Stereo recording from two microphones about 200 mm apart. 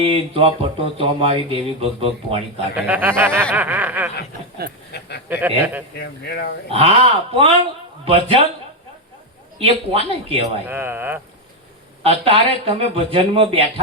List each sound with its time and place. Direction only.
0.0 s speech: 30° right (ahead or behind)
2.7 s speech: 10° right (ahead or behind)
4.9 s duck: 55° left (ahead or behind)
5.3 s speech: 10° right (ahead or behind)
6.0 s speech: 55° left (ahead or behind)
6.7 s speech: 30° right (ahead or behind)
9.6 s speech: 30° right (ahead or behind)
10.7 s speech: 10° right (ahead or behind)
12.0 s speech: 25° right (ahead or behind)